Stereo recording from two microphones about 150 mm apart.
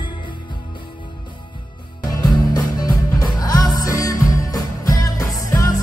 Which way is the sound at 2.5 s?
25° left (ahead or behind).